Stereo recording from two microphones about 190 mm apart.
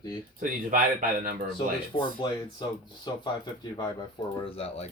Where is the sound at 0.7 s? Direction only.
45° right (ahead or behind).